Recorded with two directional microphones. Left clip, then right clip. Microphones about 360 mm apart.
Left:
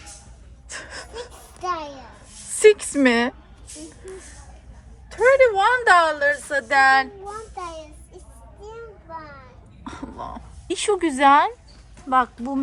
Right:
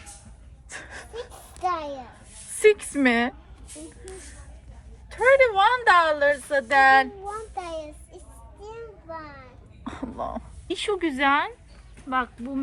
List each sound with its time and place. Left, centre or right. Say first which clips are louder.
0.7 s gasp: left 4 dB; centre
1.6 s a sound: even; right
2.6 s speech: left 4 dB; centre
5.1 s a woman's voice: left 2 dB; centre
7.6 s child singing: even; right
8.7 s a sound: left 1 dB; right
9.8 s speech: right 2 dB; centre